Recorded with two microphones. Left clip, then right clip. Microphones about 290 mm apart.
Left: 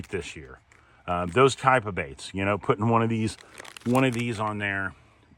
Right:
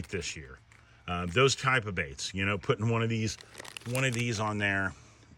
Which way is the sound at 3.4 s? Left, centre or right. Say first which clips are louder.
Left 1 dB; centre.